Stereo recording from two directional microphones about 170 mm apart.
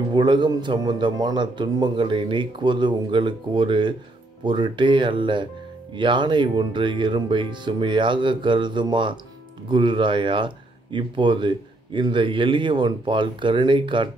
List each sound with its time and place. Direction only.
0.1 s speech: 25° right (ahead or behind)